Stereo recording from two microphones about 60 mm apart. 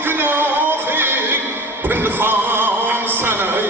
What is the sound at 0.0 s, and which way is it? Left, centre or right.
Music, right.